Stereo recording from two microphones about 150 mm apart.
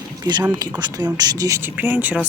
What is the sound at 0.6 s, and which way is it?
Speech, 25° right (ahead or behind).